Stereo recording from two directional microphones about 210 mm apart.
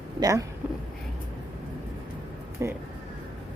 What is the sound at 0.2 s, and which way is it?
Speech, 15° right (ahead or behind).